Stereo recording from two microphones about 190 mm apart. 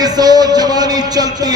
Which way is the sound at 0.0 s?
20° right (ahead or behind).